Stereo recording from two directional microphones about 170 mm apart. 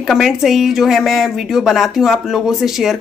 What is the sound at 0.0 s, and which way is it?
A woman's voice, centre (ahead or behind).